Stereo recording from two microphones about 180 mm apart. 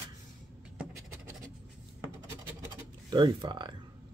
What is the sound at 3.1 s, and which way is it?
Speech, 25° right (ahead or behind).